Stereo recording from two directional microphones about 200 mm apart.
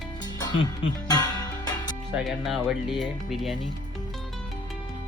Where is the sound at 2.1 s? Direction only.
Centre (ahead or behind).